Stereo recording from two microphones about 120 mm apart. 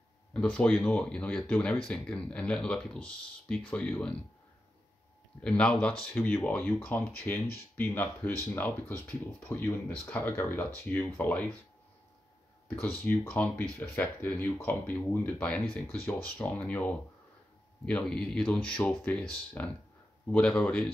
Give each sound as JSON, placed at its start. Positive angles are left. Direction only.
{"t": 0.3, "sound": "speech", "side_deg": 10}
{"t": 5.4, "sound": "speech", "side_deg": 10}
{"t": 12.8, "sound": "speech", "side_deg": 20}